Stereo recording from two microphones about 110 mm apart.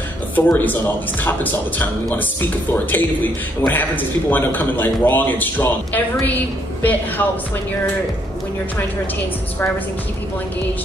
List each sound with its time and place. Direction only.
0.4 s a man's voice: 15° left (ahead or behind)